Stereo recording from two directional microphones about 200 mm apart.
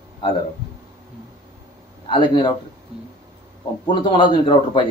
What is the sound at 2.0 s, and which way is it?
Speech, 25° left (ahead or behind).